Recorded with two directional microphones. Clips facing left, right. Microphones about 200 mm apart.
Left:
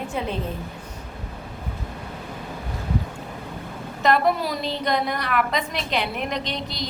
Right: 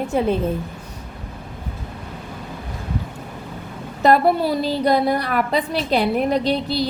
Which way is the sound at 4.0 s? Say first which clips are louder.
Right 5 dB; 35° right (ahead or behind).